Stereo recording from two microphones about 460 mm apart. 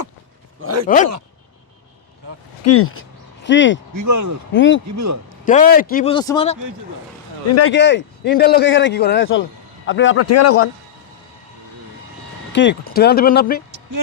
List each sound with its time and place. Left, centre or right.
0.6 s speech: right
2.6 s speech: left
3.9 s speech: right
4.5 s speech: left
4.9 s speech: right
5.5 s a man's voice: centre
7.4 s speech: left
12.5 s speech: left
13.7 s a sound: right